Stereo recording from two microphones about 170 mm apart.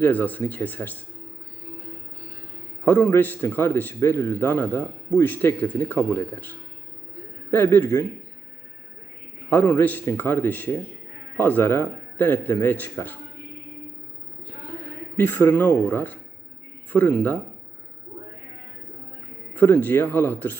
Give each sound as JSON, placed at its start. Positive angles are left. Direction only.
{"t": 0.0, "sound": "a man's voice", "side_deg": 10}
{"t": 2.8, "sound": "a man's voice", "side_deg": 15}
{"t": 7.5, "sound": "a man's voice", "side_deg": 10}
{"t": 9.5, "sound": "a man's voice", "side_deg": 10}
{"t": 15.1, "sound": "a man's voice", "side_deg": 15}
{"t": 19.5, "sound": "a man's voice", "side_deg": 10}